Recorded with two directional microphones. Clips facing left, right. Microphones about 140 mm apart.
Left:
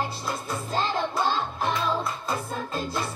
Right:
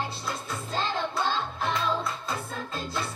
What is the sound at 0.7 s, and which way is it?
Music, 45° left (ahead or behind).